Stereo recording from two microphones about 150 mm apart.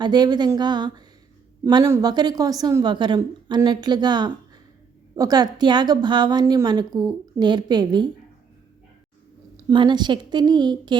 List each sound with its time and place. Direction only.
0.0 s a woman's voice: 30° right (ahead or behind)
9.6 s a woman's voice: 30° right (ahead or behind)